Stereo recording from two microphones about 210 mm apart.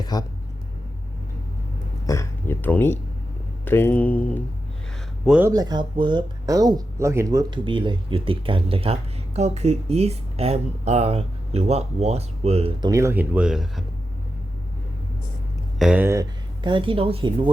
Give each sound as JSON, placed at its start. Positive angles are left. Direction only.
{"t": 0.1, "sound": "speech", "side_deg": 20}
{"t": 2.0, "sound": "a sound", "side_deg": 10}
{"t": 3.7, "sound": "speech", "side_deg": 10}
{"t": 5.2, "sound": "speech", "side_deg": -5}
{"t": 5.5, "sound": "speech", "side_deg": -20}
{"t": 12.9, "sound": "speech", "side_deg": -15}
{"t": 15.8, "sound": "speech", "side_deg": -5}
{"t": 16.6, "sound": "speech", "side_deg": -25}